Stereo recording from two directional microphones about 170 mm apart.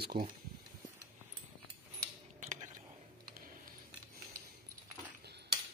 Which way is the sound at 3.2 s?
55° right (ahead or behind).